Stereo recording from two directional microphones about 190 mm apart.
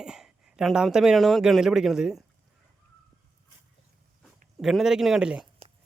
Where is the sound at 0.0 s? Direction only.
5° right (ahead or behind).